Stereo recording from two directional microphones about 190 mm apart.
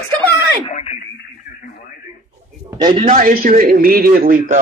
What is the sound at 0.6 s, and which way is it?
Speech, 35° left (ahead or behind).